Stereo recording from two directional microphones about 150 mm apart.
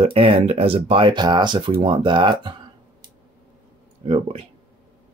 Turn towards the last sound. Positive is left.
turn(degrees=-40)  # may be behind; listen again after turning